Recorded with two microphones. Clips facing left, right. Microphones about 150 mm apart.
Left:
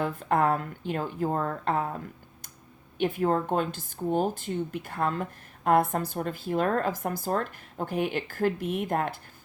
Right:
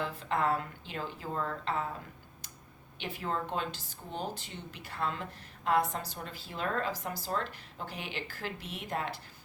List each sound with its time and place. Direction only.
0.0 s speech: 50° left (ahead or behind)
3.0 s speech: 50° left (ahead or behind)